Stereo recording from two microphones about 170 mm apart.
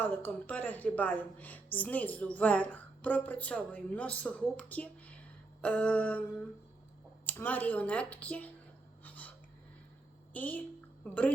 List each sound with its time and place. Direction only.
0.0 s a woman's voice: 10° left (ahead or behind)
9.0 s a sound: 10° left (ahead or behind)
10.3 s a woman's voice: 10° left (ahead or behind)